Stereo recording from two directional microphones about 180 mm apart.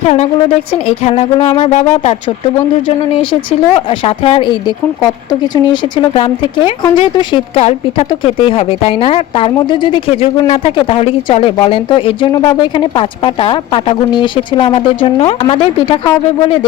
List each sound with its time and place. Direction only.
0.1 s speech: 35° left (ahead or behind)